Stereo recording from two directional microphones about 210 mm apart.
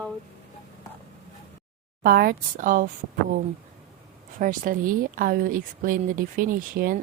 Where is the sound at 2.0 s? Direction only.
45° right (ahead or behind).